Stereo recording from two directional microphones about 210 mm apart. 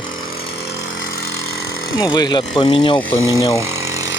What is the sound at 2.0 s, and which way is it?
Speech, 20° left (ahead or behind).